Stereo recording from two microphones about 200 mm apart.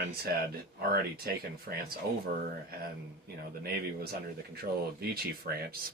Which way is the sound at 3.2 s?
50° right (ahead or behind).